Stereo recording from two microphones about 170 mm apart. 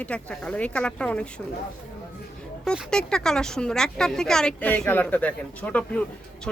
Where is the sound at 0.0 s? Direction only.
5° left (ahead or behind).